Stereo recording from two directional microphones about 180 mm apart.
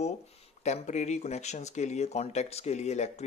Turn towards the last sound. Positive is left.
turn(degrees=40)  # may be behind; listen again after turning